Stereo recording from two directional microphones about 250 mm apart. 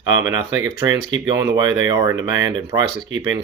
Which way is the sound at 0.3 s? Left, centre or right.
Centre.